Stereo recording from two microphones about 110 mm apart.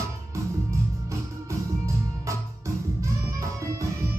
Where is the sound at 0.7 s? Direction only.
25° right (ahead or behind).